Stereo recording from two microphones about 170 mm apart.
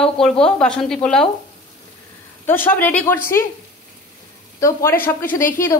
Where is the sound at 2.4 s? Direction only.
10° left (ahead or behind).